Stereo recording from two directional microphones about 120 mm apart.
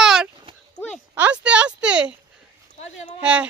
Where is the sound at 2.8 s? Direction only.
70° left (ahead or behind).